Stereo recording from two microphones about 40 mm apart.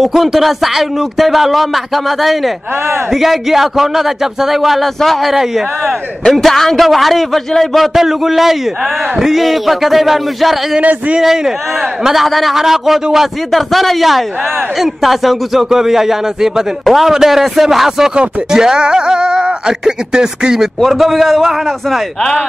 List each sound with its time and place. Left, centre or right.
0.0 s a man's voice: centre
6.3 s a man's voice: centre
10.8 s speech: right
11.1 s a man's voice: centre
20.8 s speech: centre